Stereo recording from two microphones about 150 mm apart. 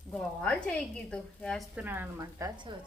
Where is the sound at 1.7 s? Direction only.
10° right (ahead or behind); by 2.7 s 25° right (ahead or behind).